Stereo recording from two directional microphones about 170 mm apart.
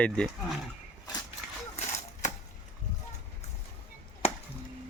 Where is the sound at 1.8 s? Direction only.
40° left (ahead or behind).